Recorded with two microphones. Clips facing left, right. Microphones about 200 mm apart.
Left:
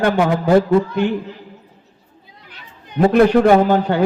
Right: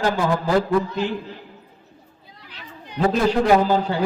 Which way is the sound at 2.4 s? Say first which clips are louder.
Right 4 dB; 50° left (ahead or behind).